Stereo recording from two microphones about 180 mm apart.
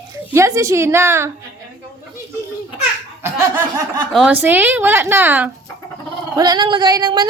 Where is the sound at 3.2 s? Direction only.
20° right (ahead or behind).